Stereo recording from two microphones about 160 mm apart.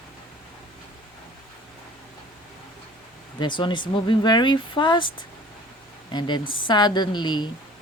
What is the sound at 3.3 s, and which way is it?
Speech, 30° left (ahead or behind).